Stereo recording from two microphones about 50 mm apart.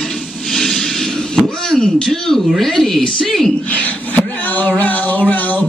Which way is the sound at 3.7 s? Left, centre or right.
Left.